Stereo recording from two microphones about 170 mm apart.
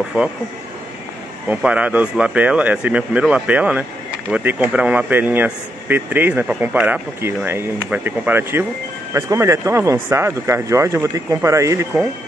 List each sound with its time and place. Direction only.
0.2 s speech: 10° right (ahead or behind)
1.5 s speech: 10° right (ahead or behind)